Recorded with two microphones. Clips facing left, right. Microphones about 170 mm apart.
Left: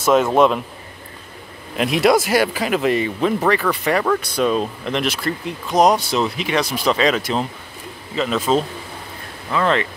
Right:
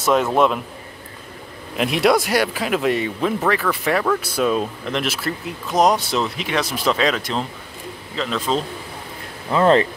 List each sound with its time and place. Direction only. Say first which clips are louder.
0.0 s speech: left 2 dB; centre (ahead or behind)
1.8 s speech: left 1 dB; centre (ahead or behind)
9.5 s speech: right 4 dB; 30° right (ahead or behind)